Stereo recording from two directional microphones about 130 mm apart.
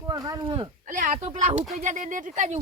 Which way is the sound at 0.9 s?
80° right.